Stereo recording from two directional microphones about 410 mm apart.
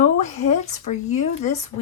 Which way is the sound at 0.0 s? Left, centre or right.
Centre.